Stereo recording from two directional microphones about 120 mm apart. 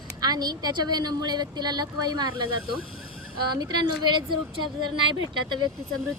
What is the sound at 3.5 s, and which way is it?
Speech, 35° right (ahead or behind).